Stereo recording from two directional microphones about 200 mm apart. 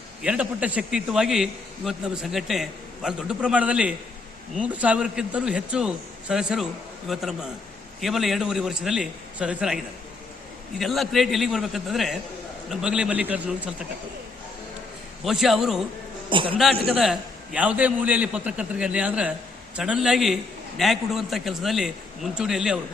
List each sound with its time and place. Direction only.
0.2 s a man's voice: 5° right (ahead or behind)
15.2 s a man's voice: centre (ahead or behind)
16.3 s a man's voice: 25° right (ahead or behind)
17.0 s a man's voice: 5° right (ahead or behind)